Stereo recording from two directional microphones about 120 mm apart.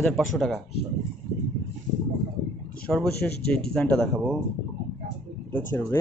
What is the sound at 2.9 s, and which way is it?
Speech, 5° left (ahead or behind).